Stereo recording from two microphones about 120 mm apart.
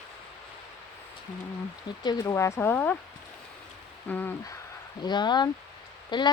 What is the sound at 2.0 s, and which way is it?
Speech, 35° left (ahead or behind).